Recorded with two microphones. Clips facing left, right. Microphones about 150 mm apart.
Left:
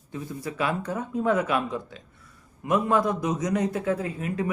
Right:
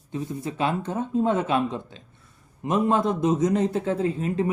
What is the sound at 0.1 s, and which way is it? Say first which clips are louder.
A man's voice: right 3 dB; 25° right (ahead or behind).